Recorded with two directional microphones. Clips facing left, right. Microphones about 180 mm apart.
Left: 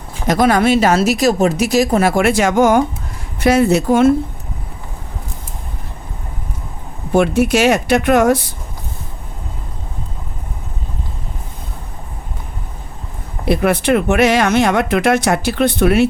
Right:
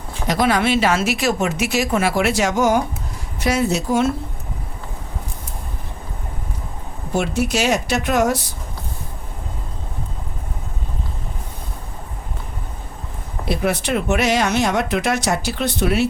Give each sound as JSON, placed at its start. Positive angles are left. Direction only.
{"t": 0.3, "sound": "speech", "side_deg": 45}
{"t": 7.1, "sound": "speech", "side_deg": 60}
{"t": 13.4, "sound": "speech", "side_deg": 60}